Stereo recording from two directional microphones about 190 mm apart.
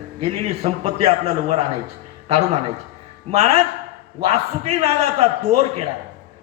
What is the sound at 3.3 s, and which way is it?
A man's voice, 35° right (ahead or behind).